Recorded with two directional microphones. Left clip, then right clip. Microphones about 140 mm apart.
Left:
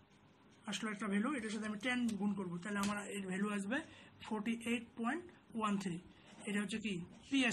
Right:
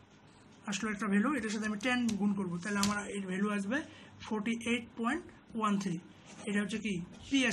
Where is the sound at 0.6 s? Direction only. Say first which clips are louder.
Right 6 dB; centre (ahead or behind).